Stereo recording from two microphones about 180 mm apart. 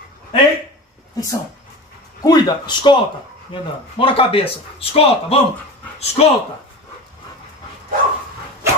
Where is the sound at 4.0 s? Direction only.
30° left (ahead or behind).